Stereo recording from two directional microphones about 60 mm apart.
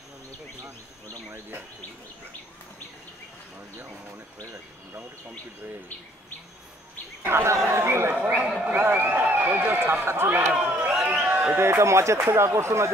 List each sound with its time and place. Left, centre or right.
7.2 s speech: right
8.1 s speech: right
8.7 s a man's voice: right
11.1 s a sound: right
11.5 s speech: right